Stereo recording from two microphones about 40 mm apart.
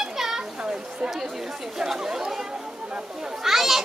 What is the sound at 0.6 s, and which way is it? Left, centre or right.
Chatter, right.